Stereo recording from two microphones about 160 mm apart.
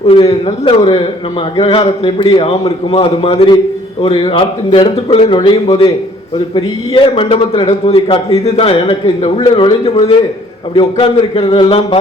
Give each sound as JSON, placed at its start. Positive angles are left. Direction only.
{"t": 0.1, "sound": "a man's voice", "side_deg": 35}
{"t": 10.8, "sound": "a man's voice", "side_deg": 35}